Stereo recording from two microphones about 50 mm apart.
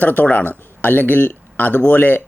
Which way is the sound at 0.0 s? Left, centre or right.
Left.